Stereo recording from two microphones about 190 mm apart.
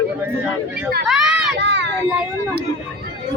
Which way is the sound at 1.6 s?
65° right (ahead or behind).